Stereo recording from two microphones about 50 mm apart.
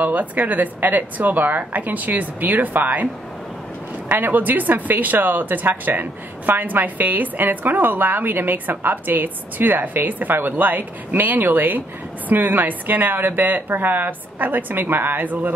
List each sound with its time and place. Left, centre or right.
0.0 s speech: right
4.1 s speech: right